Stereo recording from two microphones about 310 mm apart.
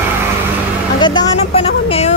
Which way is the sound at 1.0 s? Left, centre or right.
Centre.